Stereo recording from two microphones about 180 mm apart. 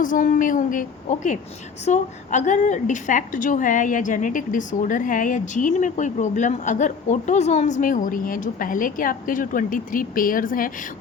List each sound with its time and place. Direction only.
0.0 s a woman's voice: 45° left (ahead or behind)